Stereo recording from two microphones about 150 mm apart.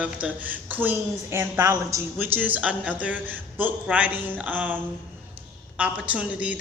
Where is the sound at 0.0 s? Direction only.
10° right (ahead or behind).